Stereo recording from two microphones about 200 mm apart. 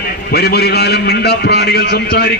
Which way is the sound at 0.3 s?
55° left (ahead or behind).